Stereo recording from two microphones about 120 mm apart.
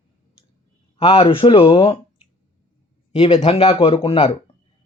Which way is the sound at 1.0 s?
50° left (ahead or behind).